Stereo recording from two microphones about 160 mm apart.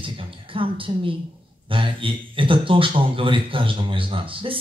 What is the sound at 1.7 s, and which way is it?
A woman's voice, 35° right (ahead or behind).